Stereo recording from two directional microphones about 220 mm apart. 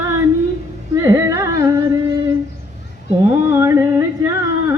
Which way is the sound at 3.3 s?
10° right (ahead or behind).